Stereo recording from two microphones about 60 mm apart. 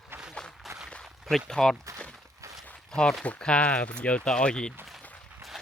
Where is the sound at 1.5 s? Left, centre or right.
Centre.